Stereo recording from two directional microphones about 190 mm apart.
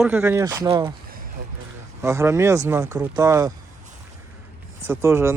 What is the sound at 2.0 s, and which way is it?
Speech, 15° right (ahead or behind).